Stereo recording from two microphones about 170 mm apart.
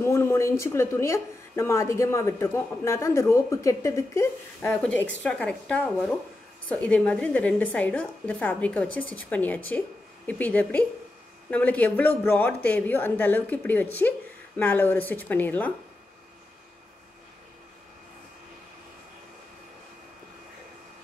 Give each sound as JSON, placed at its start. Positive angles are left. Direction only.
{"t": 0.0, "sound": "speech", "side_deg": 15}